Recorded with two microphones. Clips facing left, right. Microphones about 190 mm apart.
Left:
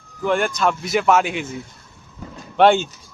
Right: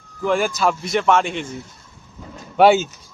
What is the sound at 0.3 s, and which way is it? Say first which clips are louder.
Speech: even; centre (ahead or behind).